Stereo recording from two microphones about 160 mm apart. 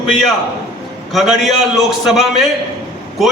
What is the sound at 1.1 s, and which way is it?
A man's voice, centre (ahead or behind).